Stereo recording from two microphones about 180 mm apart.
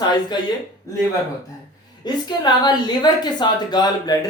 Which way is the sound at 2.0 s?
25° left (ahead or behind).